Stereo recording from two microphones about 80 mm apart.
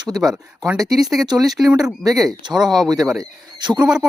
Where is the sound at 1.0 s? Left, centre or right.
Centre.